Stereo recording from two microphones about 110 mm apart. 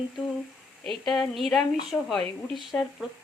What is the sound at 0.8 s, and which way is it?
A woman's voice, 5° left (ahead or behind).